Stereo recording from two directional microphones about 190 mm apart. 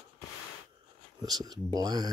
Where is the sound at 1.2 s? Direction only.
20° right (ahead or behind).